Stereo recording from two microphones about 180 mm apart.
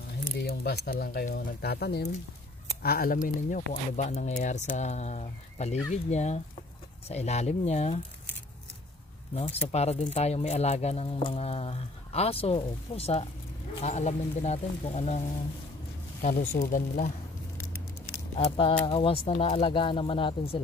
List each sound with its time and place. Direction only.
0.4 s speech: 60° left (ahead or behind); by 8.0 s 35° left (ahead or behind)
9.3 s speech: 35° left (ahead or behind)
18.3 s speech: 30° left (ahead or behind)